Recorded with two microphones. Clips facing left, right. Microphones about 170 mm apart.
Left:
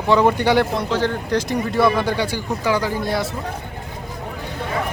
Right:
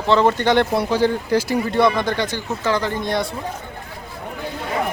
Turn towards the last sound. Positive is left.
turn(degrees=5)  # may be behind; listen again after turning